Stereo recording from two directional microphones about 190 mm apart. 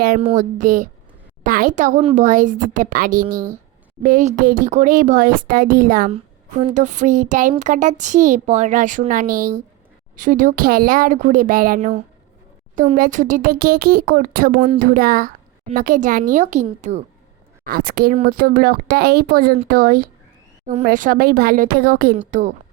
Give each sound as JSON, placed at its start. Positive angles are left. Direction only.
{"t": 0.3, "sound": "a child's voice", "side_deg": -45}
{"t": 17.6, "sound": "speech", "side_deg": -50}
{"t": 22.3, "sound": "a child's voice", "side_deg": -40}